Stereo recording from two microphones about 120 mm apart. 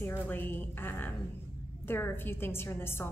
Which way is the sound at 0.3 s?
15° left (ahead or behind).